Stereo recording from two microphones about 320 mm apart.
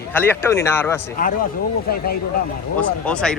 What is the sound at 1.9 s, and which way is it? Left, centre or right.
Speech, left.